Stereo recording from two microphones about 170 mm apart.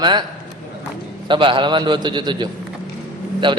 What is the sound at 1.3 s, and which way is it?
A man's voice, 30° right (ahead or behind).